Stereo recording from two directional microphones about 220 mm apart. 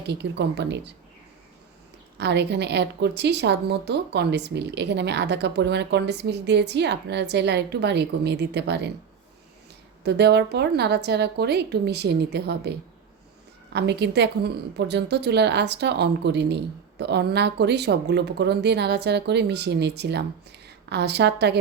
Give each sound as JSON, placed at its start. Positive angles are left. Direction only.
{"t": 0.1, "sound": "a woman's voice", "side_deg": -50}
{"t": 2.1, "sound": "a woman's voice", "side_deg": -50}
{"t": 10.0, "sound": "a woman's voice", "side_deg": -50}
{"t": 13.7, "sound": "a woman's voice", "side_deg": -50}